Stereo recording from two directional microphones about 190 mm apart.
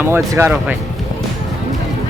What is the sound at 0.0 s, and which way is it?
Speech, 10° right (ahead or behind).